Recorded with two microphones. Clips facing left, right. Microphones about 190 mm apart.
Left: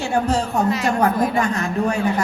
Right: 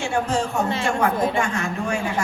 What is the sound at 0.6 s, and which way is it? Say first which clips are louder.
Speech: left 4 dB; 30° right (ahead or behind).